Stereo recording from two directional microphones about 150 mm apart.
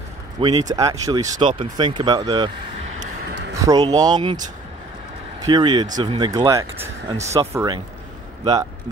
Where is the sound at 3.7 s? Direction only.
25° right (ahead or behind).